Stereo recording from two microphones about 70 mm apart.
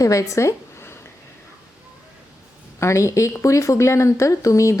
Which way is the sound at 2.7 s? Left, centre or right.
Left.